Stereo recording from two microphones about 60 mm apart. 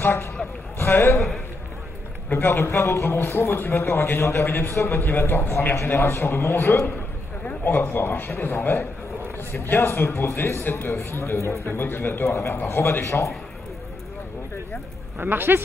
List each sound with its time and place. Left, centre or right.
0.0 s a man's voice: left
2.3 s a man's voice: left
7.4 s a man's voice: left
11.6 s a man's voice: left
13.0 s a man's voice: left
15.1 s speech: right